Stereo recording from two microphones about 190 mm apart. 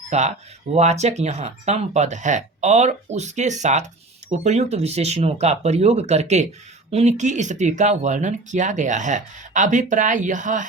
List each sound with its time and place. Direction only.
0.1 s speech: 35° right (ahead or behind)